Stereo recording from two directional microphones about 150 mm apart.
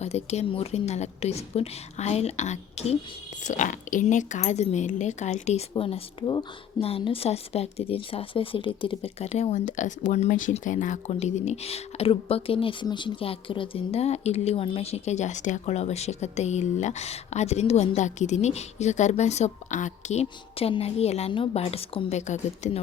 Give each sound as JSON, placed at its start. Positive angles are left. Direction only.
{"t": 0.0, "sound": "speech", "side_deg": 45}
{"t": 3.4, "sound": "speech", "side_deg": 55}
{"t": 5.7, "sound": "speech", "side_deg": 35}